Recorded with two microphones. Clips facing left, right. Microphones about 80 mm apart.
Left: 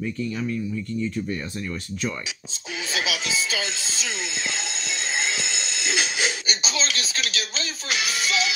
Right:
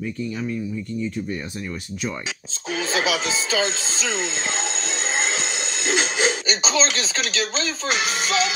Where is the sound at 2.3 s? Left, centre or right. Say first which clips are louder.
Right 6 dB; right.